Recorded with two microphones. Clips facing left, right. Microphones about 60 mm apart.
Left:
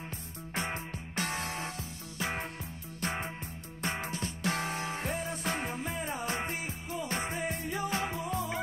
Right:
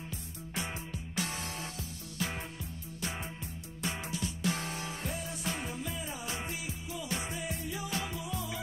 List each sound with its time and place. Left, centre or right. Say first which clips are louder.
0.6 s music: left 3 dB; left
3.0 s music: left 5 dB; left